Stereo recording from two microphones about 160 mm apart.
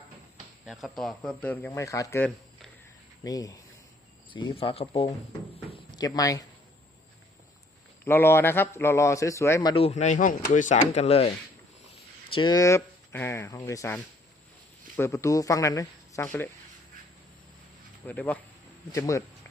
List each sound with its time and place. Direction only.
0.6 s a man's voice: centre (ahead or behind); by 5.0 s 35° left (ahead or behind)
5.9 s speech: 25° left (ahead or behind)
8.0 s a man's voice: 15° left (ahead or behind)
9.7 s speech: 40° left (ahead or behind)
12.3 s a man's voice: 30° left (ahead or behind)
18.0 s a man's voice: 10° left (ahead or behind)